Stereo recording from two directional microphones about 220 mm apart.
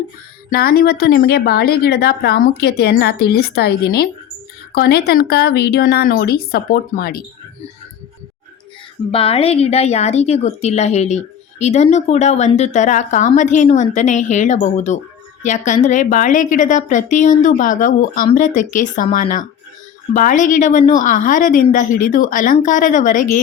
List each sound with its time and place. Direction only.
0.5 s a woman's voice: 45° left (ahead or behind)
9.1 s speech: 25° left (ahead or behind)